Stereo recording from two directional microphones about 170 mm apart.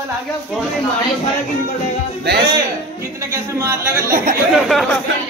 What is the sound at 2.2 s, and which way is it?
Speech, 75° right (ahead or behind).